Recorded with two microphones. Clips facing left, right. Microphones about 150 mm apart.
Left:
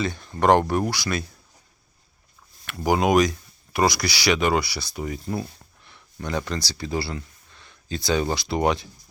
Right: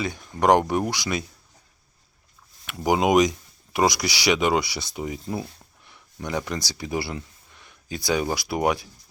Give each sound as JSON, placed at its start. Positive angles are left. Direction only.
{"t": 0.0, "sound": "speech", "side_deg": -10}
{"t": 2.6, "sound": "speech", "side_deg": -15}